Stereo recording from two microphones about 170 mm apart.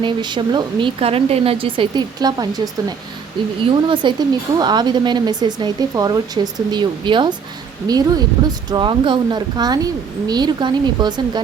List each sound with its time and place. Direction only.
0.0 s speech: 25° right (ahead or behind)
3.8 s speech: 30° right (ahead or behind)